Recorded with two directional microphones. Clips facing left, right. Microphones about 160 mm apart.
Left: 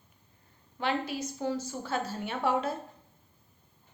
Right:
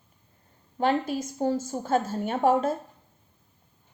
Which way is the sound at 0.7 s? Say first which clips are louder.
Right 6 dB; 45° right (ahead or behind).